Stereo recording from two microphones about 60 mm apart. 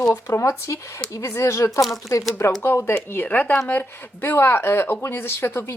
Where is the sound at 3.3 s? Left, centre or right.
Left.